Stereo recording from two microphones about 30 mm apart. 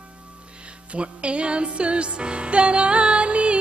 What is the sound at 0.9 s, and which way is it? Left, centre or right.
Music, right.